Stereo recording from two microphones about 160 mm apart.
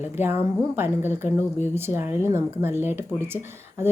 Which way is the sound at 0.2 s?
15° right (ahead or behind).